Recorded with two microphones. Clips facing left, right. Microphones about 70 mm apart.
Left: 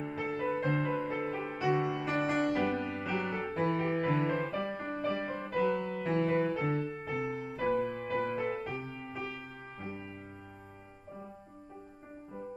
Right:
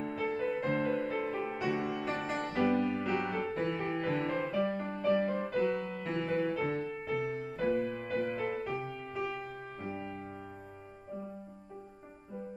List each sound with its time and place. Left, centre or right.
0.0 s music: centre
6.3 s music: centre